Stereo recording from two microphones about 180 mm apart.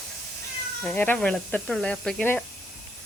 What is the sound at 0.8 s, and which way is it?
Speech, 10° left (ahead or behind).